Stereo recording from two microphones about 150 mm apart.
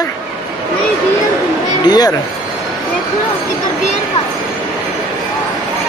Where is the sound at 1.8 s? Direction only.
25° left (ahead or behind).